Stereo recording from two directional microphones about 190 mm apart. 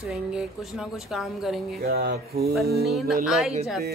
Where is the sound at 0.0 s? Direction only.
5° right (ahead or behind).